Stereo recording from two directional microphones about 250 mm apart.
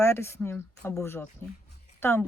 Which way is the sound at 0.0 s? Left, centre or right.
Centre.